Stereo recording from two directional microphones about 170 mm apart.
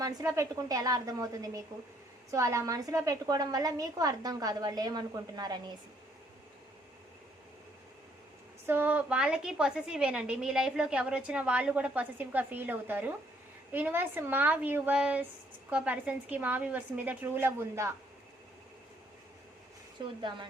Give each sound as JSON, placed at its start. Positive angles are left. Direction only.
{"t": 0.0, "sound": "a woman's voice", "side_deg": -20}
{"t": 8.6, "sound": "a woman's voice", "side_deg": -10}